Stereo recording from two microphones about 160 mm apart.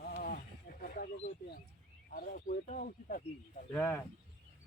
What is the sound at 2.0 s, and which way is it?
Speech, 60° left (ahead or behind).